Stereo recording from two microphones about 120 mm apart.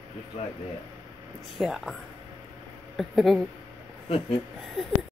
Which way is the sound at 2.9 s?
Centre (ahead or behind).